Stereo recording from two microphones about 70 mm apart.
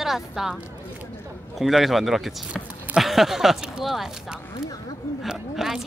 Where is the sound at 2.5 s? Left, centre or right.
Centre.